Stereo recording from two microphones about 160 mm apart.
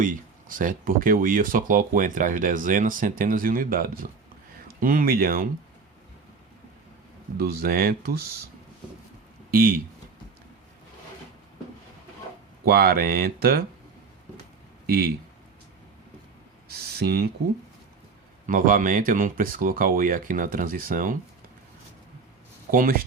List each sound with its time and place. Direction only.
0.0 s speech: 55° right (ahead or behind)
7.3 s speech: 70° right (ahead or behind)
9.5 s speech: 70° right (ahead or behind)
12.6 s speech: 70° right (ahead or behind)
14.8 s speech: 70° right (ahead or behind)
16.6 s a sound: 75° right (ahead or behind)
18.4 s speech: 55° right (ahead or behind)
22.7 s speech: 60° right (ahead or behind)